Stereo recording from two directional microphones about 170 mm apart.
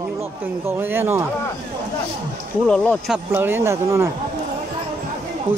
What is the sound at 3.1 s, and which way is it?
Speech, 10° right (ahead or behind).